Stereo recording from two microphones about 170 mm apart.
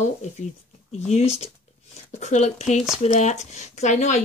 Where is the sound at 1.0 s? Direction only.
40° left (ahead or behind).